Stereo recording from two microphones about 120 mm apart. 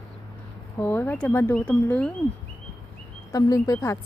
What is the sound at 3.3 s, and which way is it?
Speech, 30° left (ahead or behind).